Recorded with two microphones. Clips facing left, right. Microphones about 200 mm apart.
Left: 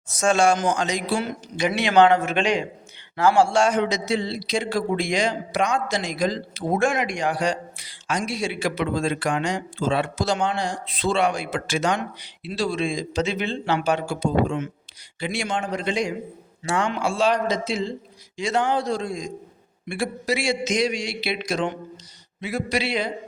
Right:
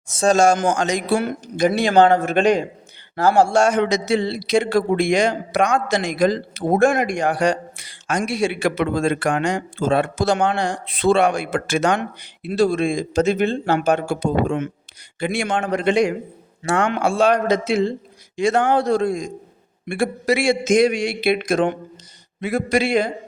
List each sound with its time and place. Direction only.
0.2 s a man's voice: 40° right (ahead or behind)
2.4 s a man's voice: 45° right (ahead or behind)
3.8 s a man's voice: 65° right (ahead or behind)
5.9 s a man's voice: 65° right (ahead or behind); by 23.1 s 50° right (ahead or behind)